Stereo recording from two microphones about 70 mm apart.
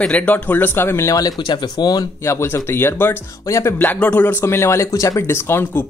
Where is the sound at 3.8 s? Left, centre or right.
Left.